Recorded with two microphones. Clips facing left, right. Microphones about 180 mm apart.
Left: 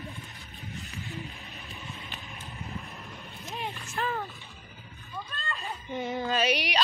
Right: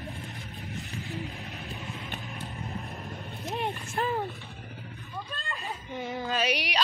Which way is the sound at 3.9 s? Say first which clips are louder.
Right 2 dB; 25° right (ahead or behind).